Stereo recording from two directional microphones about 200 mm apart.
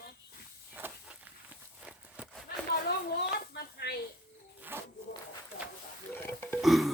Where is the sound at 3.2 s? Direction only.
55° left (ahead or behind).